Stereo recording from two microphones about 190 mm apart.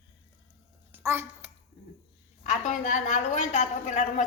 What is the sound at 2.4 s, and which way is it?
A woman's voice, 40° left (ahead or behind).